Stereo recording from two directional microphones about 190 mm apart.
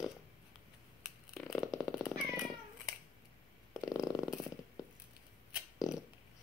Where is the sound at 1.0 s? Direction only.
Centre (ahead or behind).